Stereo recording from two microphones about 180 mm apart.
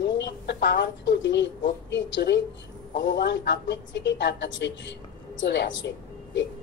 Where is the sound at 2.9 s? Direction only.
70° left (ahead or behind).